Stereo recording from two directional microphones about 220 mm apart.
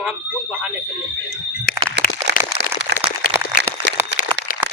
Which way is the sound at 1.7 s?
40° left (ahead or behind).